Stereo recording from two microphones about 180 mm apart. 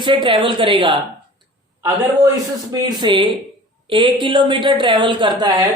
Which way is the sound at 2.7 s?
25° right (ahead or behind).